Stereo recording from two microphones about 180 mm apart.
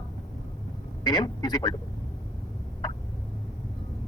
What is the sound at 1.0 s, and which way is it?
Speech, 25° left (ahead or behind).